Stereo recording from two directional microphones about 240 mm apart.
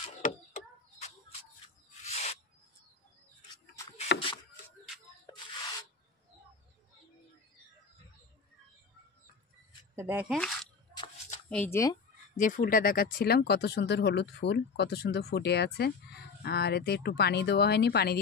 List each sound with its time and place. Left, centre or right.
2.0 s owl: left
4.1 s a sound: left
9.9 s speech: centre
10.3 s speech: centre
12.4 s speech: left